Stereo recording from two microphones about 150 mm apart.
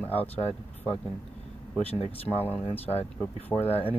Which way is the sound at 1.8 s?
40° left (ahead or behind).